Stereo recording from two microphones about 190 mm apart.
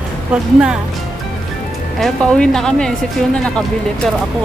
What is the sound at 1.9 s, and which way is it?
Speech, 5° left (ahead or behind).